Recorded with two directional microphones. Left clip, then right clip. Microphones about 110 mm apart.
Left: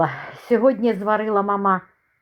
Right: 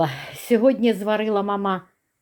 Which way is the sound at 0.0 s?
35° right (ahead or behind).